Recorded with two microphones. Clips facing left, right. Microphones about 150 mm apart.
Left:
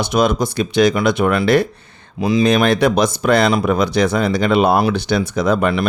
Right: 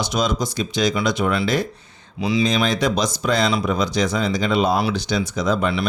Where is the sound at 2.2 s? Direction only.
50° left (ahead or behind).